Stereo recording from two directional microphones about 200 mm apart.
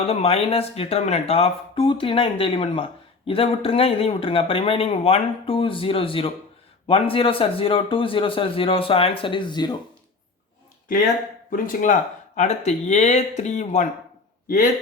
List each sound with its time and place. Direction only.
0.0 s a man's voice: 30° left (ahead or behind)
11.5 s a man's voice: 40° left (ahead or behind)